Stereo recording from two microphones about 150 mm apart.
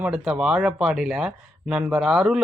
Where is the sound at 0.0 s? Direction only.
5° right (ahead or behind).